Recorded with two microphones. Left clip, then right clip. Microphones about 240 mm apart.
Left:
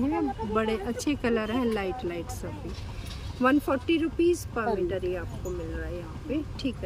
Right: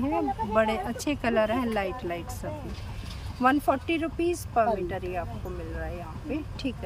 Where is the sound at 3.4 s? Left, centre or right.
Centre.